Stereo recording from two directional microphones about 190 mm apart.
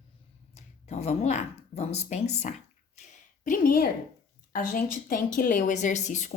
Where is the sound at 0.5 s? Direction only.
35° left (ahead or behind).